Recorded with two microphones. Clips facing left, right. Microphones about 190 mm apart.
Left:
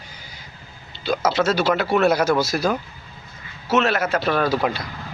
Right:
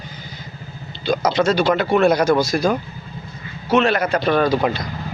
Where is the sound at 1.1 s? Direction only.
5° left (ahead or behind).